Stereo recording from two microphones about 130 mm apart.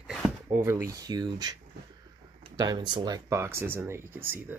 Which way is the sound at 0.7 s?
25° right (ahead or behind).